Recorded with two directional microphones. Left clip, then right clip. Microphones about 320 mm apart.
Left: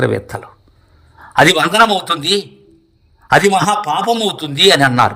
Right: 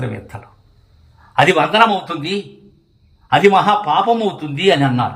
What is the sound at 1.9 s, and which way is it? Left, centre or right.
Speech, left.